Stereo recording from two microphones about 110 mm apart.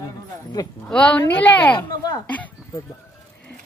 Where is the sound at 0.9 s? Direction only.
10° left (ahead or behind).